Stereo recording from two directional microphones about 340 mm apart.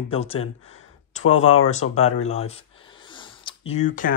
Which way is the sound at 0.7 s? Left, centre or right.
Centre.